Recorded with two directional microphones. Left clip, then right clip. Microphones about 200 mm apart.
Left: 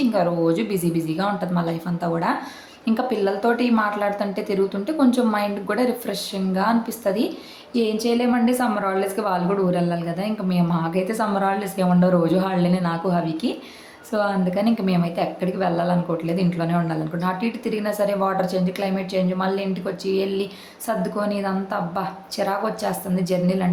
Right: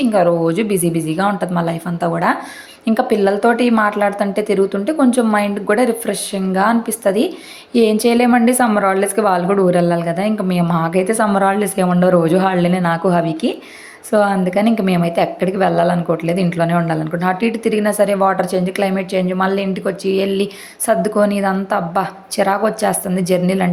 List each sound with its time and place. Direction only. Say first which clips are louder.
0.0 s a woman's voice: right 6 dB; 25° right (ahead or behind)